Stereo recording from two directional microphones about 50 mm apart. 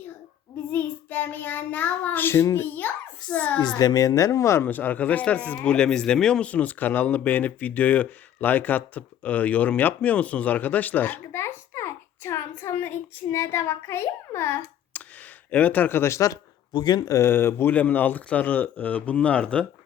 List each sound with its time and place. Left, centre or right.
0.7 s child singing: left
2.4 s a child's voice: left
3.3 s speech: left
4.1 s speech: left
4.6 s speech: left
5.7 s speech: centre
6.4 s speech: left
11.3 s a sound: left
13.3 s a child's voice: left
14.9 s a sound: left
15.4 s speech: left
15.9 s speech: left
17.2 s speech: left
17.7 s speech: left